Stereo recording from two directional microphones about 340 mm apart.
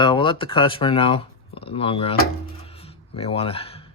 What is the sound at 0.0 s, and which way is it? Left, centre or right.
Speech, centre.